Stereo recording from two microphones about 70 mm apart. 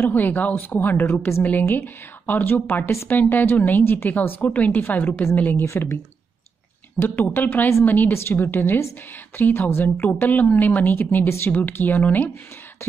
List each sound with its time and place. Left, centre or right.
0.0 s a woman's voice: left
5.7 s a woman's voice: left
7.0 s a woman's voice: left
8.1 s a woman's voice: left